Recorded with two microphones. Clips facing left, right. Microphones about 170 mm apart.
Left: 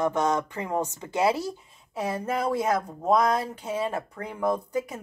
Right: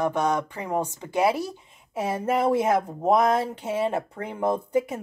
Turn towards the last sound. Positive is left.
turn(degrees=-25)  # may be behind; listen again after turning